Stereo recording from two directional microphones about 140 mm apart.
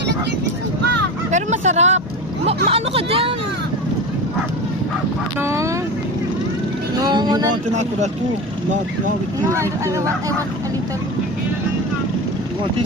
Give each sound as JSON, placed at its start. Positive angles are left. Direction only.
{"t": 1.3, "sound": "speech", "side_deg": -55}
{"t": 5.4, "sound": "speech", "side_deg": -20}
{"t": 7.0, "sound": "speech", "side_deg": -30}
{"t": 7.7, "sound": "speech", "side_deg": -55}
{"t": 9.5, "sound": "speech", "side_deg": -20}